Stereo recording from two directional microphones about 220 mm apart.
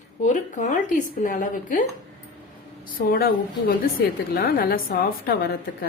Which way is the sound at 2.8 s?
40° left (ahead or behind).